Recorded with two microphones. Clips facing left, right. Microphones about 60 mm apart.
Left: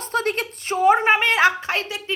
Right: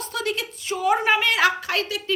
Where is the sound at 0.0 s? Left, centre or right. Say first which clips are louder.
Left 4 dB; left.